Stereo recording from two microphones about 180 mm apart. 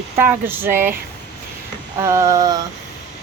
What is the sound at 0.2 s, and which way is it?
Speech, 10° right (ahead or behind).